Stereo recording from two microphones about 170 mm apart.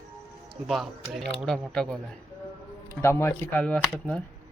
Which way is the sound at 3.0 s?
15° left (ahead or behind).